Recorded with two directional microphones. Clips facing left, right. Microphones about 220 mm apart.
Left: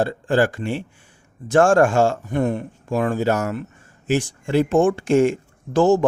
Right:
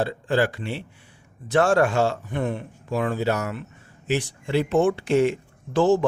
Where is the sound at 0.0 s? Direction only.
50° left (ahead or behind).